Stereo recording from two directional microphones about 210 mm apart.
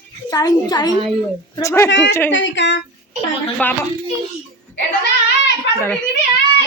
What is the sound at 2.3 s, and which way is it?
Speech, 60° left (ahead or behind).